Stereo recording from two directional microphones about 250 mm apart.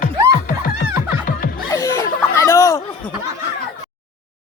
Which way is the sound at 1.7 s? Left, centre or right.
Centre.